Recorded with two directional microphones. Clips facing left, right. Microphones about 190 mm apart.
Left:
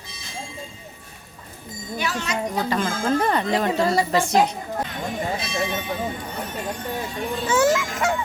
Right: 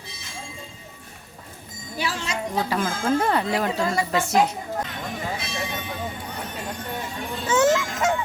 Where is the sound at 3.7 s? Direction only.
35° left (ahead or behind).